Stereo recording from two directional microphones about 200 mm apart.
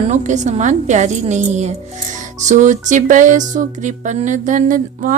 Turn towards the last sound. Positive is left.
turn(degrees=-40)  # may be behind; listen again after turning